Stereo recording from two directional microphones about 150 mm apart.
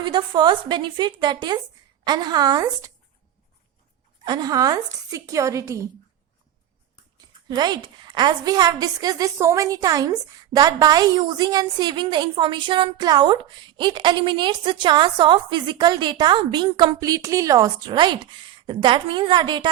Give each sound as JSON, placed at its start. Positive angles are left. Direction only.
{"t": 0.0, "sound": "a woman's voice", "side_deg": -30}
{"t": 4.3, "sound": "a woman's voice", "side_deg": -25}
{"t": 7.4, "sound": "a woman's voice", "side_deg": -30}